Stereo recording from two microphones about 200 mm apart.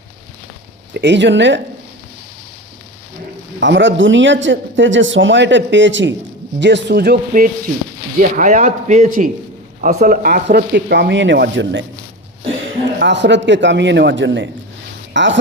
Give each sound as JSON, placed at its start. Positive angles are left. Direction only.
{"t": 0.9, "sound": "speech", "side_deg": -60}
{"t": 3.6, "sound": "a man's voice", "side_deg": -65}
{"t": 13.0, "sound": "speech", "side_deg": -60}